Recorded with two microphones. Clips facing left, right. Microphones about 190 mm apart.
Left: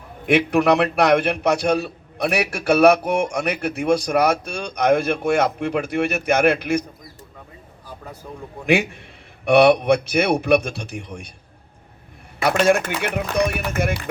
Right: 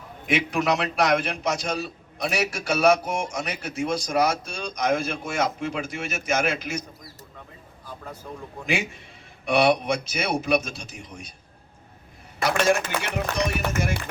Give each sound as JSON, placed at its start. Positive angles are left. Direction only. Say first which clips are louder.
{"t": 0.3, "sound": "a man's voice", "louder": "left 7 dB", "side_deg": 60}
{"t": 8.2, "sound": "a man's voice", "louder": "left 2 dB", "side_deg": 5}
{"t": 8.6, "sound": "a man's voice", "louder": "left 9 dB", "side_deg": 60}
{"t": 12.4, "sound": "a man's voice", "louder": "left 4 dB", "side_deg": 55}